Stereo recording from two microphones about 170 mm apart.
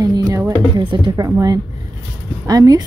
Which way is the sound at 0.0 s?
20° right (ahead or behind).